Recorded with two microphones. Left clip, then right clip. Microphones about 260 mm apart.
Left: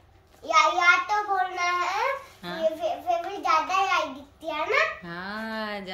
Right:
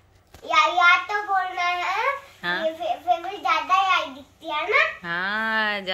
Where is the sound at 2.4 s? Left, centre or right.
Centre.